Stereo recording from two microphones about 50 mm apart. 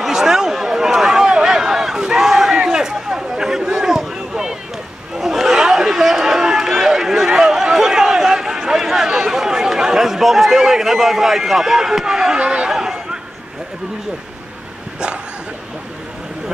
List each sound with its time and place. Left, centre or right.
0.0 s a sound: centre
5.1 s run: centre
8.6 s chatter: centre